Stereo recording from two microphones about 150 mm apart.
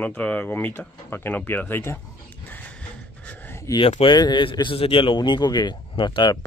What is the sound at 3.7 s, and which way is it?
Speech, 35° left (ahead or behind).